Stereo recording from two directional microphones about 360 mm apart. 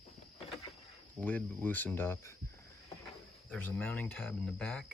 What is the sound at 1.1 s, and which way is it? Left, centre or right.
Speech, centre.